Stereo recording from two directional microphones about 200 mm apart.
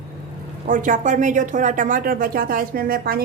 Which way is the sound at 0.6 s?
40° right (ahead or behind).